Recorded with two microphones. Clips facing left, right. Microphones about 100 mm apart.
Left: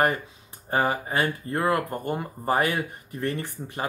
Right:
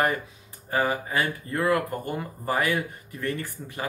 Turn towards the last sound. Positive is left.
turn(degrees=25)  # may be behind; listen again after turning